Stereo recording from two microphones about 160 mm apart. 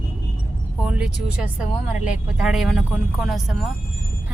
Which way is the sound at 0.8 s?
5° right (ahead or behind).